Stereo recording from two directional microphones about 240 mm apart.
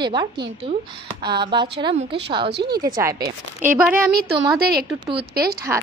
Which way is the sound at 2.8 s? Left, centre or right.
Centre.